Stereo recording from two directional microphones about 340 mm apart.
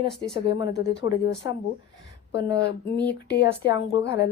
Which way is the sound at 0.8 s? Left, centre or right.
Left.